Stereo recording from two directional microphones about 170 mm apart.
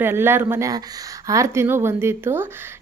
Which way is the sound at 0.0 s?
15° right (ahead or behind).